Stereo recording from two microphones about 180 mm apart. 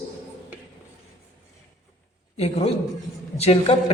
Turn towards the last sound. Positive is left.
turn(degrees=30)  # may be behind; listen again after turning